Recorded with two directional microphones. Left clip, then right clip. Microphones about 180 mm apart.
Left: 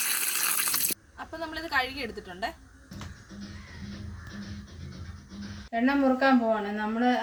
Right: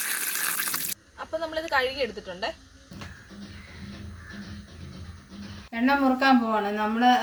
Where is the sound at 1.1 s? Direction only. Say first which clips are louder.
Right 6 dB; 25° left (ahead or behind).